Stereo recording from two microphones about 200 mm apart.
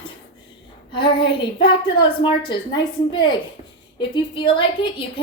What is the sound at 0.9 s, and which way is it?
A woman's voice, 25° left (ahead or behind).